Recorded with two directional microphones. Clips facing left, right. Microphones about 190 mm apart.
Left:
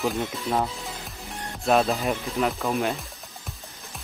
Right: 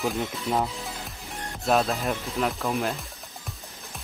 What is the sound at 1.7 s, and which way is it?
Speech, centre (ahead or behind).